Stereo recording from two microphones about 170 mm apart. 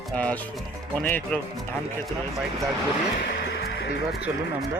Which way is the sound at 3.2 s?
70° left (ahead or behind).